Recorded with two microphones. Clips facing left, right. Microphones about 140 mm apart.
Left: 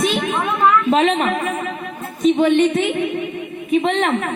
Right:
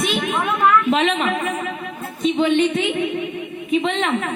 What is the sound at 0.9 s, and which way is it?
A woman's voice, 40° left (ahead or behind).